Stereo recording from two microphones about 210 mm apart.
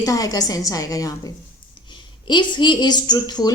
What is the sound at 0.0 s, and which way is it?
Speech, 15° left (ahead or behind).